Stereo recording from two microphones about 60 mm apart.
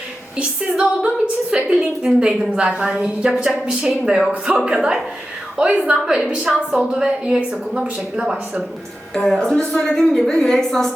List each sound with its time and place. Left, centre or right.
0.7 s a woman's voice: centre
9.1 s a woman's voice: centre